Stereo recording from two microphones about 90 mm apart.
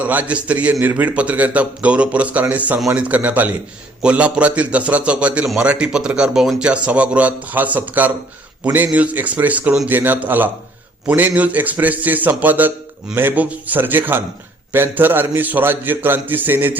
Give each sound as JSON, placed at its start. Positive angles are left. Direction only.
{"t": 0.0, "sound": "a man's voice", "side_deg": -20}